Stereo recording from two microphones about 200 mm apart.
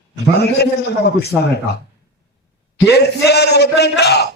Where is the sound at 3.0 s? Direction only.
55° left (ahead or behind).